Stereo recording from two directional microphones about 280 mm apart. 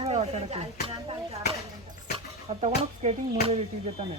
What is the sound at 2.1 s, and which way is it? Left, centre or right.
Speech, right.